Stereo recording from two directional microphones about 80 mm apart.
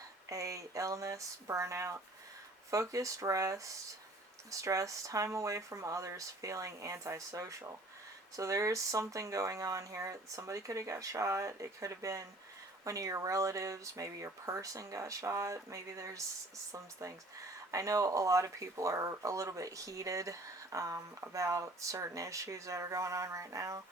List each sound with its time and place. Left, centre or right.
0.3 s speech: right